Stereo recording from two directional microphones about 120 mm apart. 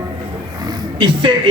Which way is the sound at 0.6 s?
35° right (ahead or behind).